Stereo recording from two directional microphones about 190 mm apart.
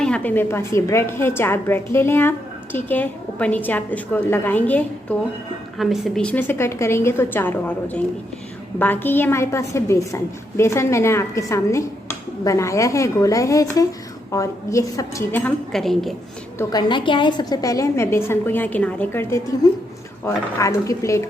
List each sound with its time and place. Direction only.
0.0 s a woman's voice: 5° left (ahead or behind)
16.6 s a woman's voice: 20° left (ahead or behind)